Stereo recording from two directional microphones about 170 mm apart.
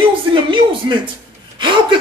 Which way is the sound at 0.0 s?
30° right (ahead or behind).